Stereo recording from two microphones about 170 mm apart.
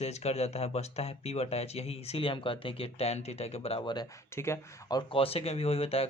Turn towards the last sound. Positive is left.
turn(degrees=35)  # may be behind; listen again after turning